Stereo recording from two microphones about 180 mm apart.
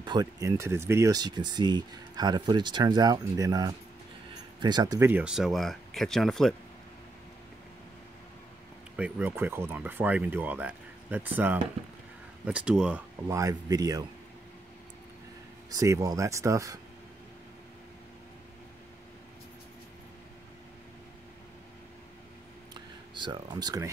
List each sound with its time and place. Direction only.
0.0 s speech: 25° right (ahead or behind)
5.1 s speech: 5° right (ahead or behind)
8.9 s speech: 10° right (ahead or behind)
13.3 s speech: 20° right (ahead or behind)
15.7 s speech: 20° right (ahead or behind)
22.8 s a sound: 25° right (ahead or behind)